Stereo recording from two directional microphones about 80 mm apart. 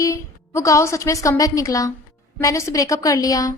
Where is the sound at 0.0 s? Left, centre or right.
Left.